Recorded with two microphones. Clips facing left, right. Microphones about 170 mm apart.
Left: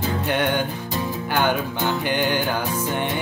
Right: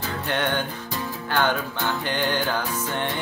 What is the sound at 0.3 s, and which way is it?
Music, 10° left (ahead or behind).